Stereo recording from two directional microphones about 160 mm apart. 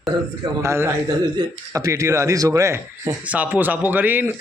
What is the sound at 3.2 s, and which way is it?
Speech, 10° right (ahead or behind).